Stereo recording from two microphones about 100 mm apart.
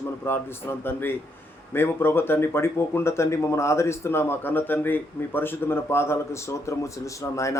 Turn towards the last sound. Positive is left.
turn(degrees=30)  # may be behind; listen again after turning